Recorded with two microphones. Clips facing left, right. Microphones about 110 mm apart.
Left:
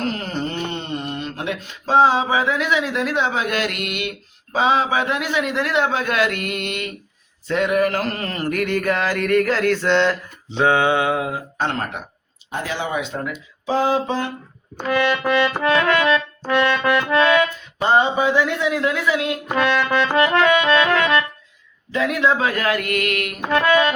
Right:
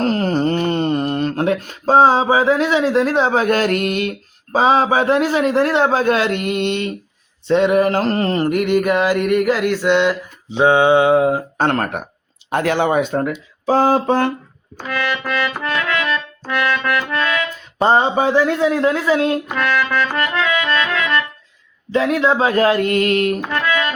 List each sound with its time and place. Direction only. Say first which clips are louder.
0.0 s a sound: right 8 dB; 40° right (ahead or behind)
4.5 s a man's voice: right 4 dB; 40° right (ahead or behind)
7.4 s mantra: right 5 dB; 25° right (ahead or behind); by 12.0 s 55° right (ahead or behind)
12.5 s speech: right 8 dB; 60° right (ahead or behind)
13.7 s a sound: right 5 dB; 45° right (ahead or behind)
14.8 s music: left 3 dB; 15° left (ahead or behind)
16.1 s music: left 3 dB; 20° left (ahead or behind)
17.7 s a man's voice: right 3 dB; 35° right (ahead or behind)
19.5 s music: left 5 dB; 15° left (ahead or behind)
21.9 s a man's voice: right 3 dB; 30° right (ahead or behind)
23.6 s music: left 4 dB; 25° left (ahead or behind)